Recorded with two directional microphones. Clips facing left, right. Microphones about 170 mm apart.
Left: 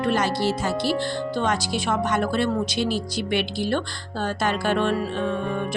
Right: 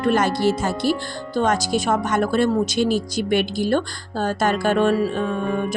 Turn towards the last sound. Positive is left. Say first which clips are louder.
# right 5 dB
turn(degrees=-45)  # may be behind; listen again after turning